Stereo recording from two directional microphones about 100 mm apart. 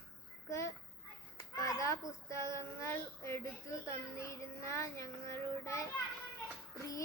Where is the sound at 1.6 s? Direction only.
35° left (ahead or behind).